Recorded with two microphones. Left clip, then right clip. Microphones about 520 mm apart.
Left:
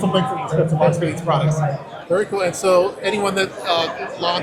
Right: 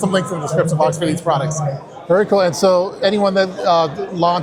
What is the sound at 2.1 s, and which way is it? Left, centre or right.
Speech, right.